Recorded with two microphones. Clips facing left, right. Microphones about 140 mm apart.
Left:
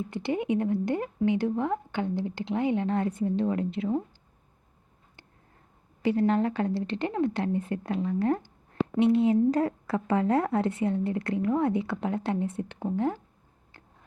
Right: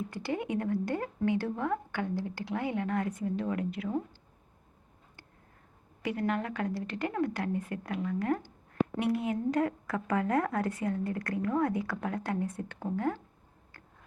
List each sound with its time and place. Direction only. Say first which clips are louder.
0.1 s a woman's voice: left 9 dB; 20° left (ahead or behind)
6.0 s a woman's voice: left 7 dB; 30° left (ahead or behind)